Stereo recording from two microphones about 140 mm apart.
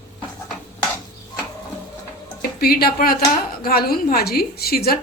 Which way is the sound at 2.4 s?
90° left.